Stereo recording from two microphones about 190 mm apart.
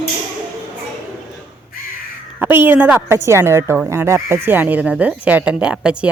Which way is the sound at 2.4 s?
10° right (ahead or behind).